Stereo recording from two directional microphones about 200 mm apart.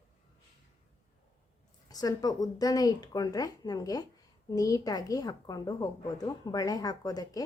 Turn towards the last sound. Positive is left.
turn(degrees=20)  # may be behind; listen again after turning